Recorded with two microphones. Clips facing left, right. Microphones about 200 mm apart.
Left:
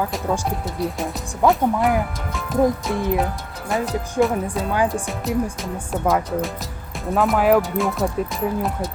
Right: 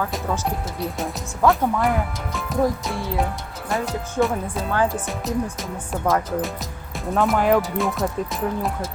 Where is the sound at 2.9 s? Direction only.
15° left (ahead or behind).